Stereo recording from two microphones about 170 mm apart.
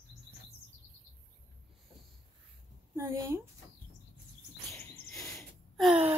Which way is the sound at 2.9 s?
15° right (ahead or behind).